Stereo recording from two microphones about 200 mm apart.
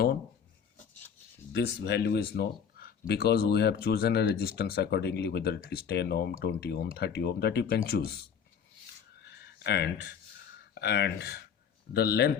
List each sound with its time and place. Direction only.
1.5 s speech: 55° left (ahead or behind)
9.2 s a sound: 55° left (ahead or behind)
10.8 s speech: 55° left (ahead or behind)